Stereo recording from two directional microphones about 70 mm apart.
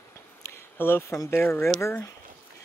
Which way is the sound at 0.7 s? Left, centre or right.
Left.